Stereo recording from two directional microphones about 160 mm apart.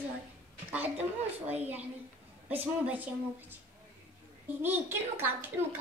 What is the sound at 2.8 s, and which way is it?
Speech, 10° right (ahead or behind).